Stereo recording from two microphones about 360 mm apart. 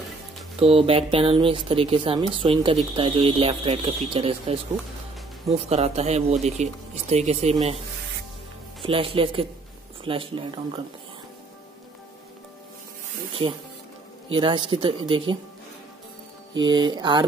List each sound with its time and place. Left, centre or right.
0.6 s speech: centre
8.8 s speech: centre
13.4 s speech: centre
16.5 s speech: centre